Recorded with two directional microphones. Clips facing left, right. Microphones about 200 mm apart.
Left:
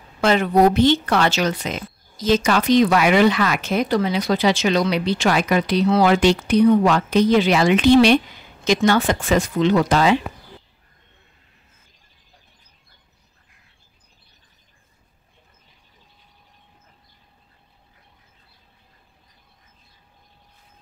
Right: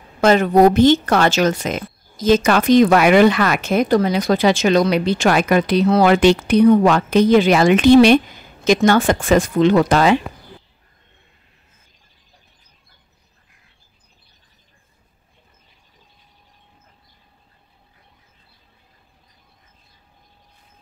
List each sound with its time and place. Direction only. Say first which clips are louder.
0.2 s a woman's voice: right 4 dB; 45° right (ahead or behind)